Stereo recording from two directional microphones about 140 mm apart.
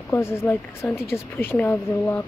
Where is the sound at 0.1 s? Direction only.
15° left (ahead or behind).